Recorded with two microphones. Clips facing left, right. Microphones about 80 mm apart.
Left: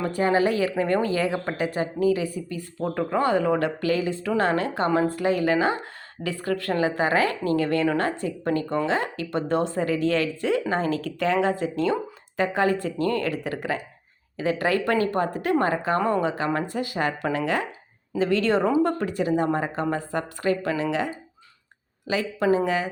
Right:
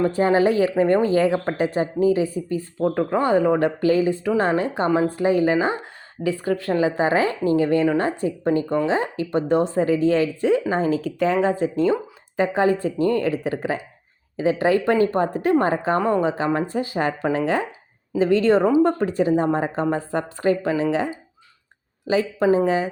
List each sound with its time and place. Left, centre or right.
0.0 s speech: right